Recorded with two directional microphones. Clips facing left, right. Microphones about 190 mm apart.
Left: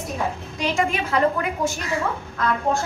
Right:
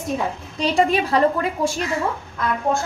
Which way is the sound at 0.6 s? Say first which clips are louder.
Right 5 dB; 35° right (ahead or behind).